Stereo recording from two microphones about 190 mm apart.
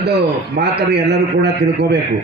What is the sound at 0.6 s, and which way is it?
Speech, 60° right (ahead or behind).